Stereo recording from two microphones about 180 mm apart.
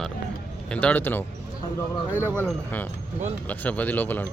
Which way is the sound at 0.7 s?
10° left (ahead or behind).